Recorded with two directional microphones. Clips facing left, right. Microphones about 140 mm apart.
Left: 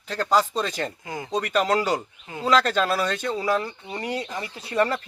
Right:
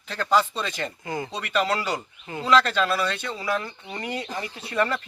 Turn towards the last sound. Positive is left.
turn(degrees=35)  # may be behind; listen again after turning